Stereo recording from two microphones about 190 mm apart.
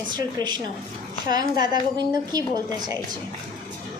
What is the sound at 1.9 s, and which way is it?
A woman's voice, 20° right (ahead or behind).